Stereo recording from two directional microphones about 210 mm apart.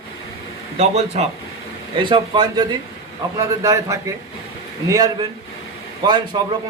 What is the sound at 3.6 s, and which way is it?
A man's voice, 15° right (ahead or behind).